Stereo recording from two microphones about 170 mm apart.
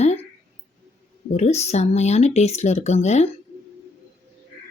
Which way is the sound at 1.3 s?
40° left (ahead or behind).